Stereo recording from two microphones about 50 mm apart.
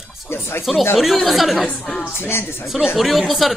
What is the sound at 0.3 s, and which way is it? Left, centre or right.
Speech, left.